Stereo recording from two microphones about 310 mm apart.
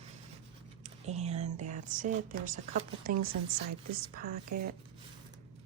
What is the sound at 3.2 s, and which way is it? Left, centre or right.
Speech, right.